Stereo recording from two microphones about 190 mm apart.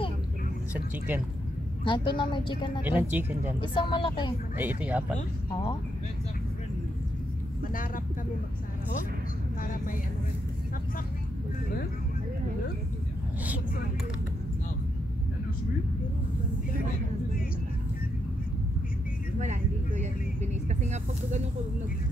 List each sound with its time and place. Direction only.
0.7 s speech: 10° right (ahead or behind)
1.9 s speech: 25° left (ahead or behind)
2.8 s speech: 10° right (ahead or behind)
3.9 s speech: 25° left (ahead or behind)
4.6 s speech: 10° right (ahead or behind)
7.7 s speech: 45° left (ahead or behind)
19.4 s vehicle: 40° right (ahead or behind)
20.6 s speech: 40° right (ahead or behind)